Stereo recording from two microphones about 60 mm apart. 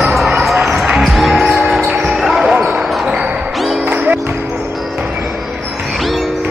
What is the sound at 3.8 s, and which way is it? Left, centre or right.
Music, right.